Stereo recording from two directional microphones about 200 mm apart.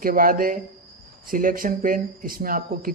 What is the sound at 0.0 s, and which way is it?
Speech, 45° right (ahead or behind).